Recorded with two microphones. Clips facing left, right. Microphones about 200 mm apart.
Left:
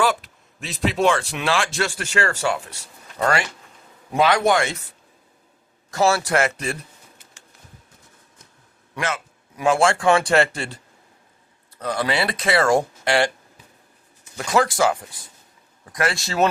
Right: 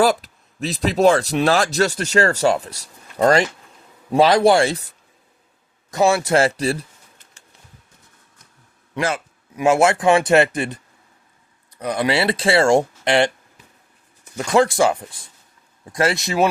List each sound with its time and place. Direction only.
0.0 s speech: 40° right (ahead or behind)
5.9 s speech: 20° right (ahead or behind)
9.0 s speech: 30° right (ahead or behind)
11.8 s speech: 20° right (ahead or behind)
14.3 s speech: 25° right (ahead or behind)